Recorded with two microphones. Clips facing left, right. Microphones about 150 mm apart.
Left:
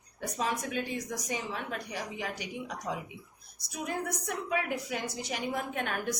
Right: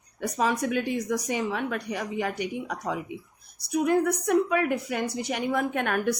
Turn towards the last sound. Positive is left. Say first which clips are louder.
# right 7 dB
turn(degrees=-65)  # may be behind; listen again after turning